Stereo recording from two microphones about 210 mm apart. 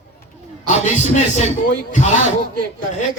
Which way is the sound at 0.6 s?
35° left (ahead or behind).